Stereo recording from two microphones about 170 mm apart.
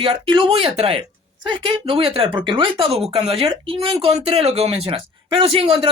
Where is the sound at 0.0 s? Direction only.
30° right (ahead or behind).